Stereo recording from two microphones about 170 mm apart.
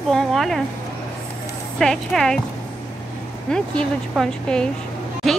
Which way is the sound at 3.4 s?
5° left (ahead or behind).